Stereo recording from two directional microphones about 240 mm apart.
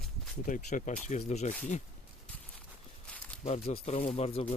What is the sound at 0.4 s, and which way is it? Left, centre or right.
Speech, left.